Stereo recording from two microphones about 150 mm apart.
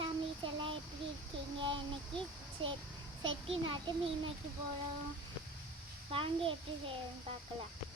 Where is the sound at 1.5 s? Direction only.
35° right (ahead or behind).